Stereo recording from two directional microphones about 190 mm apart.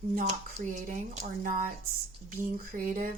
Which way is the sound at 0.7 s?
40° right (ahead or behind).